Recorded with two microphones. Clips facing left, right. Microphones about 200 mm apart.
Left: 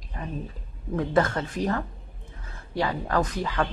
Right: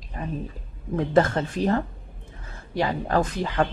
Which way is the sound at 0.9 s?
25° right (ahead or behind).